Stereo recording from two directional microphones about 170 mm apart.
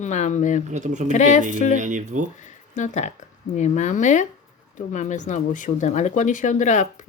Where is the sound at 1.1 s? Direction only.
45° left (ahead or behind).